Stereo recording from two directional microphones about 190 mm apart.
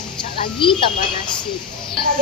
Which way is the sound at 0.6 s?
25° left (ahead or behind).